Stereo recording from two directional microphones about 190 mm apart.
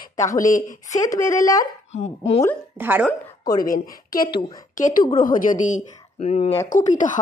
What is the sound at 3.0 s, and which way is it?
A woman's voice, 20° left (ahead or behind).